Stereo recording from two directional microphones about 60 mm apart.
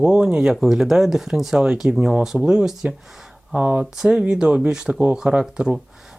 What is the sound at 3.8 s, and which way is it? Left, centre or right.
Speech, centre.